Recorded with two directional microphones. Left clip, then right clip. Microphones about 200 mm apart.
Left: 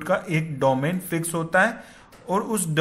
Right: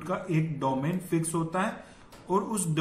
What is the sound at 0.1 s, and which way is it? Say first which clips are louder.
A man's voice: left 7 dB; 50° left (ahead or behind).